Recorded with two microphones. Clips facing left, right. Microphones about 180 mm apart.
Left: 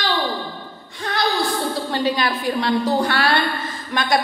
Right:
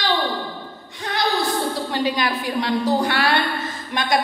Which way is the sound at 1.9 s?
15° right (ahead or behind).